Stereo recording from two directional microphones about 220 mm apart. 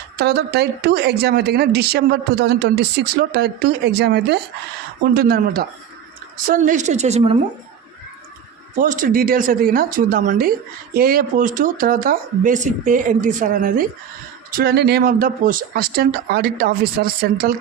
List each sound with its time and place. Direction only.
0.2 s speech: 50° right (ahead or behind); by 7.3 s 25° right (ahead or behind)
8.8 s speech: 35° right (ahead or behind)